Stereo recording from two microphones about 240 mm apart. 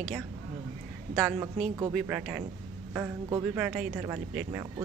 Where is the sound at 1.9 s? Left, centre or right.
Centre.